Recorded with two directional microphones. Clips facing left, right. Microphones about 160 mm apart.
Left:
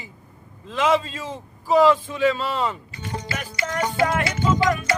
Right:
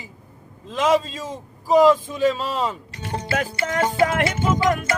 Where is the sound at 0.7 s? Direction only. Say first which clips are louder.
Right 1 dB; 40° right (ahead or behind).